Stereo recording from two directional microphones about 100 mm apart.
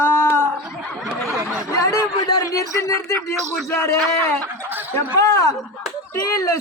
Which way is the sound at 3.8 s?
20° left (ahead or behind).